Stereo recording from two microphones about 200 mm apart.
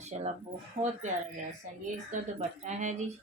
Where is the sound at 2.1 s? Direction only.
35° right (ahead or behind).